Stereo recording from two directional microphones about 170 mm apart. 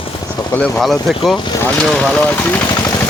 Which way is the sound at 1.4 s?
25° left (ahead or behind).